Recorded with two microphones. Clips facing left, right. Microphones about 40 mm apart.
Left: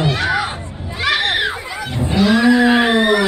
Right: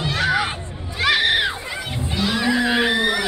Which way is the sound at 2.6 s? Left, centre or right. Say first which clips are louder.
Left 6 dB; left.